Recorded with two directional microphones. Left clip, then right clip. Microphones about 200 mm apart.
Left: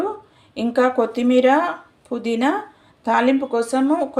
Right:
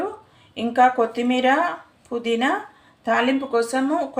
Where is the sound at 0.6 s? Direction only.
30° left (ahead or behind).